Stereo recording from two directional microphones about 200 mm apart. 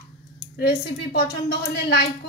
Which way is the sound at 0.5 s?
55° left (ahead or behind).